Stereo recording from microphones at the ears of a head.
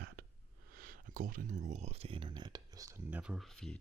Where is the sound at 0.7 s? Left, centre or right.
Right.